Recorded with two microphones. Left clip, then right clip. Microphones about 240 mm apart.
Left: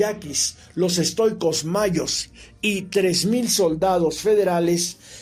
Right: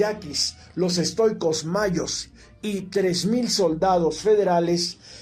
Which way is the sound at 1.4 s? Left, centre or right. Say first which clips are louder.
Left 2 dB; left.